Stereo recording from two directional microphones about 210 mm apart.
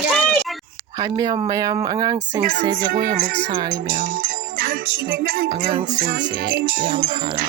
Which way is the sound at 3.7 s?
40° right (ahead or behind).